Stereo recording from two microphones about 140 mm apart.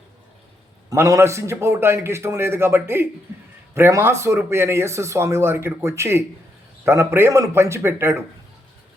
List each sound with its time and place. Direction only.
0.9 s a man's voice: 25° right (ahead or behind)